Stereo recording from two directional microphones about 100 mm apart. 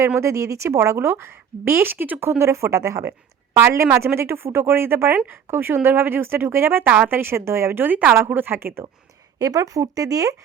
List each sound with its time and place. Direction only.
0.2 s speech: 30° right (ahead or behind)
9.4 s speech: 35° right (ahead or behind)